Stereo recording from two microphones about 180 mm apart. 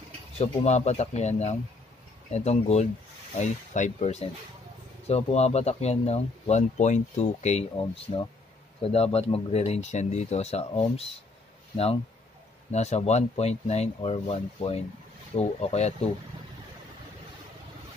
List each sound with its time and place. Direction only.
0.4 s speech: 40° left (ahead or behind)